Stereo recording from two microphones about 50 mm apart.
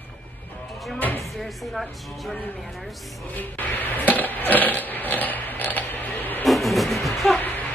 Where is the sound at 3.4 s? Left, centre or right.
Left.